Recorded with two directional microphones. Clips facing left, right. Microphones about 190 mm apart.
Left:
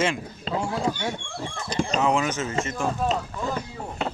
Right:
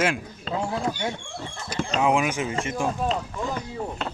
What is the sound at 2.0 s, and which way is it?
Speech, 10° right (ahead or behind).